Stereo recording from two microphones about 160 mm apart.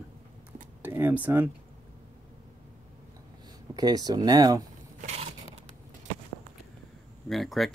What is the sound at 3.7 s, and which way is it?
Speech, 25° right (ahead or behind).